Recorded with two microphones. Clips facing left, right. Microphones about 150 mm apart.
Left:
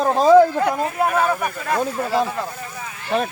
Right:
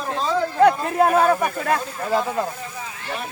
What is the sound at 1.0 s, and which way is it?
Speech, 30° right (ahead or behind).